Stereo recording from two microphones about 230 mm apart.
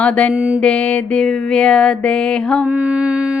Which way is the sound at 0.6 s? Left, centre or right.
Centre.